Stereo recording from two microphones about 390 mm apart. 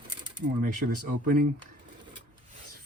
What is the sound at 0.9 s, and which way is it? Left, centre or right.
Speech, right.